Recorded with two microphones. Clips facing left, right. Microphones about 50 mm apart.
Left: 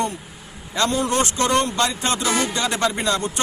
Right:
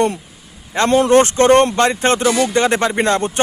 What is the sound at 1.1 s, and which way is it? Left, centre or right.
A man's voice, right.